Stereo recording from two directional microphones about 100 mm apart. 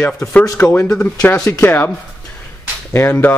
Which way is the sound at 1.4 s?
35° left (ahead or behind).